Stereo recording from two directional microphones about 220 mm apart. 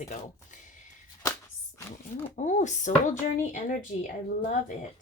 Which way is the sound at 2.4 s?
35° left (ahead or behind).